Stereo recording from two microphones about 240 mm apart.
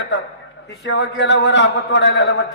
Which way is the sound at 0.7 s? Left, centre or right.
Left.